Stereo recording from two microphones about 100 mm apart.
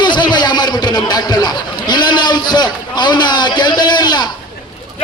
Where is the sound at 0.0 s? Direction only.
50° left (ahead or behind).